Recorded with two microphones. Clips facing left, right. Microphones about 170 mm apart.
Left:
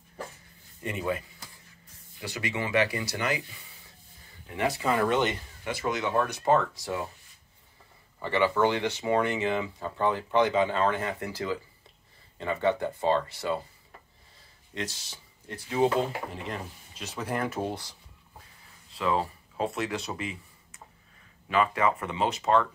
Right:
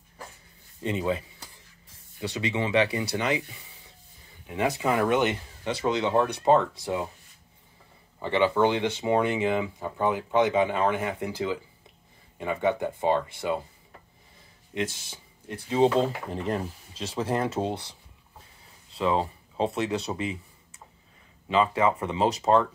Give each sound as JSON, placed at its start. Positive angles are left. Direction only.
{"t": 0.8, "sound": "speech", "side_deg": -20}
{"t": 2.2, "sound": "speech", "side_deg": -25}
{"t": 4.5, "sound": "speech", "side_deg": -15}
{"t": 5.8, "sound": "speech", "side_deg": -30}
{"t": 8.2, "sound": "speech", "side_deg": -20}
{"t": 14.7, "sound": "speech", "side_deg": -15}
{"t": 16.3, "sound": "speech", "side_deg": -35}
{"t": 18.9, "sound": "speech", "side_deg": -25}
{"t": 21.5, "sound": "speech", "side_deg": -25}